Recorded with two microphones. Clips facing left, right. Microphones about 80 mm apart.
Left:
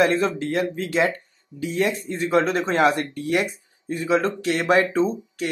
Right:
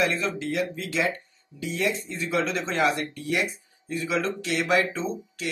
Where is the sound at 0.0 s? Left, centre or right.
Left.